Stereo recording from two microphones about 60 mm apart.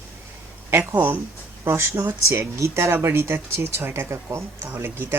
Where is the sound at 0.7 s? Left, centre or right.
Right.